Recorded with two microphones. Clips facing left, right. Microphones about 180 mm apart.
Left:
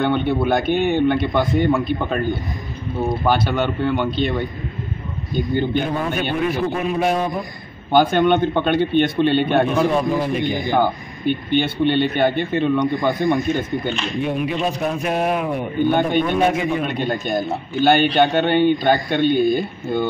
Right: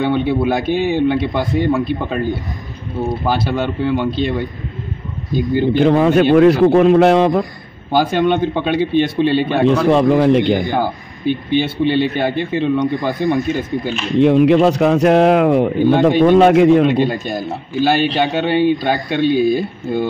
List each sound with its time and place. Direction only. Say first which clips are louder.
0.0 s speech: right 3 dB; 5° right (ahead or behind)
3.3 s speech: right 2 dB; 30° right (ahead or behind)
3.8 s speech: right 3 dB; 5° right (ahead or behind)
5.7 s a man's voice: right 9 dB; 90° right
7.9 s speech: even; centre (ahead or behind)
9.8 s a man's voice: right 7 dB; 80° right
10.8 s speech: even; centre (ahead or behind)
14.2 s a man's voice: right 12 dB; 80° right
17.1 s speech: even; centre (ahead or behind)